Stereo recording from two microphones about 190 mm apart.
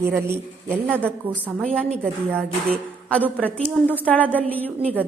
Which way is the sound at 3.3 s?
10° left (ahead or behind).